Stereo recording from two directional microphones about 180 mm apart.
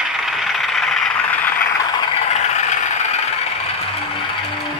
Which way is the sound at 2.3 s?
40° left (ahead or behind).